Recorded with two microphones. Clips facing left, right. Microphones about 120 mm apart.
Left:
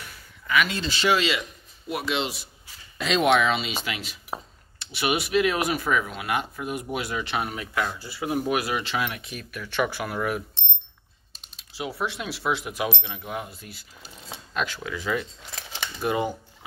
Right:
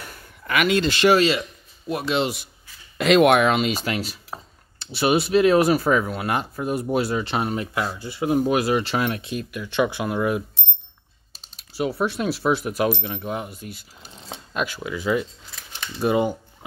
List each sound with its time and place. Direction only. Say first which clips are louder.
0.0 s speech: right 4 dB; 50° right (ahead or behind)
1.9 s speech: right 5 dB; 35° right (ahead or behind)
3.0 s speech: right 6 dB; 60° right (ahead or behind); by 10.6 s 20° right (ahead or behind)
11.8 s speech: right 7 dB; 45° right (ahead or behind)
13.2 s speech: right 4 dB; 25° right (ahead or behind)
15.5 s scissors: left 4 dB; 85° left
16.0 s speech: right 5 dB; 20° right (ahead or behind)